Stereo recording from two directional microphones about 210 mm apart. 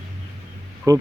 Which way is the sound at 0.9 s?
15° right (ahead or behind).